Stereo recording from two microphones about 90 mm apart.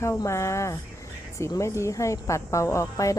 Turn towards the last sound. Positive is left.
turn(degrees=35)  # may be behind; listen again after turning